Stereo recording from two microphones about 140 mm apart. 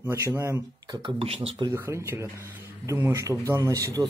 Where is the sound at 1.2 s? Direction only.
45° right (ahead or behind).